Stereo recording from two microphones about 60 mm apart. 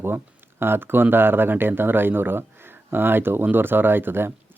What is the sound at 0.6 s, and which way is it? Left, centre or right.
Speech, right.